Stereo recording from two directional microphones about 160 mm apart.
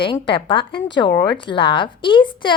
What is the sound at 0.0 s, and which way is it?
Speech, 30° left (ahead or behind).